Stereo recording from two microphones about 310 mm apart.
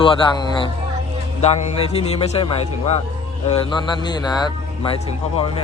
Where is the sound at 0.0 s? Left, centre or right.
Centre.